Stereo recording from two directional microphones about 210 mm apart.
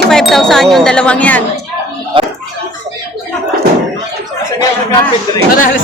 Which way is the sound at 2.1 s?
25° right (ahead or behind).